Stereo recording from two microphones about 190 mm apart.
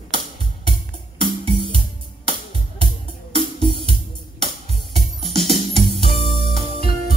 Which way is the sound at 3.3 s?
25° right (ahead or behind).